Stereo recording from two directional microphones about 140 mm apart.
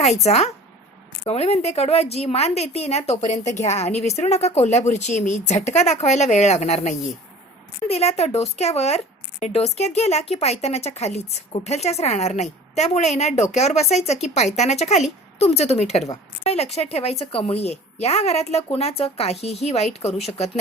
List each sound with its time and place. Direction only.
0.3 s a woman's voice: 50° left (ahead or behind)